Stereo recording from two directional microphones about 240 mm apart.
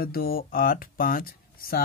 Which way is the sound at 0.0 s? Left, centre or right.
Left.